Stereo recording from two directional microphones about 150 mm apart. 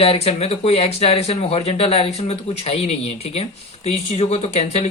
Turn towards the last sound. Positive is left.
turn(degrees=50)  # may be behind; listen again after turning